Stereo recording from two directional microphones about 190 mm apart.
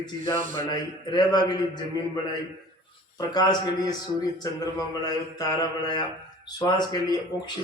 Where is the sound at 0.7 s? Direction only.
25° left (ahead or behind).